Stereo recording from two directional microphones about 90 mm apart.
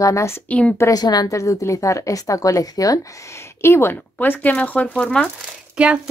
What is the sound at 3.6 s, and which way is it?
Speech, 30° left (ahead or behind).